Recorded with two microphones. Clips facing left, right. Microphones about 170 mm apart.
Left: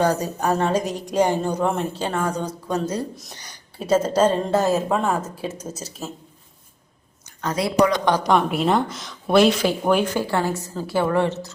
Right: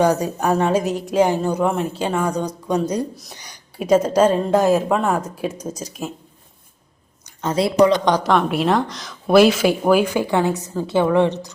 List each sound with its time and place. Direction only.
0.0 s a woman's voice: 10° right (ahead or behind)
7.4 s speech: 25° right (ahead or behind)
8.2 s a woman's voice: centre (ahead or behind); by 11.3 s 15° right (ahead or behind)